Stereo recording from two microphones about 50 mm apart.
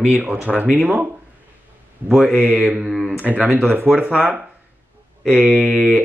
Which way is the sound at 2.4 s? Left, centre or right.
Right.